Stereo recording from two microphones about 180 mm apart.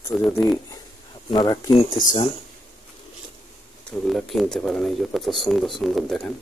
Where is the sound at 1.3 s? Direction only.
25° left (ahead or behind).